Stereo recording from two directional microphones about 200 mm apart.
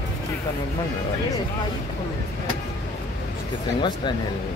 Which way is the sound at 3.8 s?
20° left (ahead or behind).